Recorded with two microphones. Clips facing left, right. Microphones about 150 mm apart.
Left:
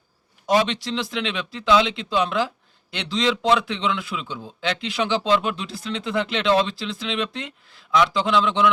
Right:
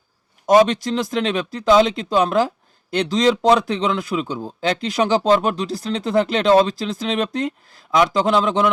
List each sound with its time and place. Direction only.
0.4 s a man's voice: 45° right (ahead or behind)